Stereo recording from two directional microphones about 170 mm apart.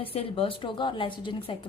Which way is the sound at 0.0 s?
35° left (ahead or behind).